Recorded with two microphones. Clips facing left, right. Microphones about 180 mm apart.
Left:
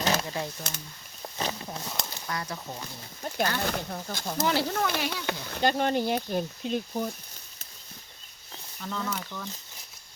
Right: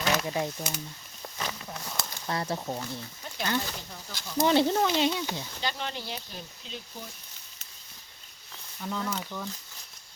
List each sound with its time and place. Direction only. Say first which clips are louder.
0.0 s a sound: even; 35° left (ahead or behind)
0.3 s speech: right 3 dB; 20° right (ahead or behind)
1.4 s a sound: left 4 dB; 30° left (ahead or behind)
2.2 s speech: right 7 dB; 30° right (ahead or behind)
3.2 s snake: left 7 dB; 45° left (ahead or behind)
3.6 s speech: left 7 dB; 60° left (ahead or behind)
4.4 s speech: right 4 dB; 20° right (ahead or behind)
5.2 s speech: left 6 dB; 60° left (ahead or behind)
8.8 s speech: right 1 dB; 10° right (ahead or behind)